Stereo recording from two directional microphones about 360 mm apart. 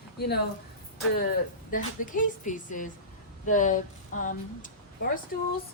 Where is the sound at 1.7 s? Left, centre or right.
Left.